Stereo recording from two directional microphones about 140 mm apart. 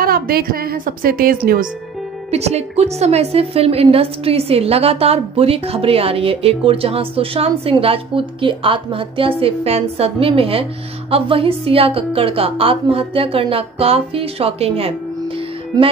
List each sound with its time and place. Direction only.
0.0 s a woman's voice: 90° right
2.3 s a woman's voice: 50° right (ahead or behind)